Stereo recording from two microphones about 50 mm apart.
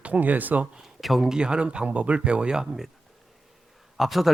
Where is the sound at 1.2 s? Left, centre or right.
Centre.